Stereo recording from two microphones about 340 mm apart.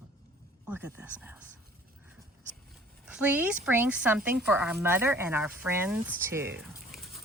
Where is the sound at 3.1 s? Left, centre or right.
Centre.